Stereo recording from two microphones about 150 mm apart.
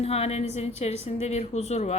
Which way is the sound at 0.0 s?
45° left (ahead or behind).